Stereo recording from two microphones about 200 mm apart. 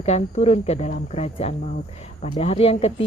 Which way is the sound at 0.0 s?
30° left (ahead or behind).